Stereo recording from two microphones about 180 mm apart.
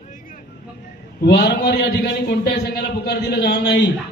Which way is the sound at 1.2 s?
65° left (ahead or behind).